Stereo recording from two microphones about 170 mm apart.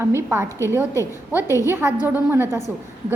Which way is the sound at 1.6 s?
15° right (ahead or behind).